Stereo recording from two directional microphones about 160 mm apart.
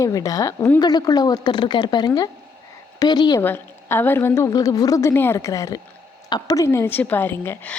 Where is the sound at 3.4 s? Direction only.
15° left (ahead or behind).